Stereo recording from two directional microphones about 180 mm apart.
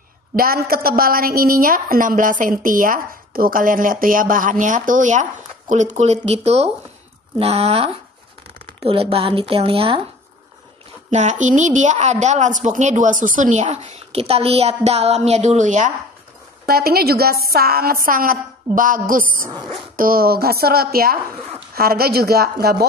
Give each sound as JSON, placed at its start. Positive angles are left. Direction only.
{"t": 0.4, "sound": "a woman's voice", "side_deg": -55}
{"t": 11.1, "sound": "a woman's voice", "side_deg": -40}
{"t": 16.6, "sound": "a woman's voice", "side_deg": -60}